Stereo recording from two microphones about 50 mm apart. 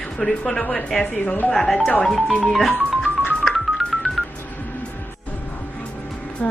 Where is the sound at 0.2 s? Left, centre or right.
Centre.